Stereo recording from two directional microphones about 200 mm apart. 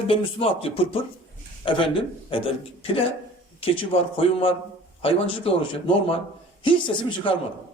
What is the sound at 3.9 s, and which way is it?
Speech, 30° left (ahead or behind).